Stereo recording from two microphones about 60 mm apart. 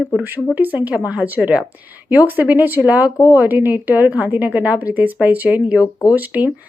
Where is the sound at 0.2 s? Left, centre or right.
Right.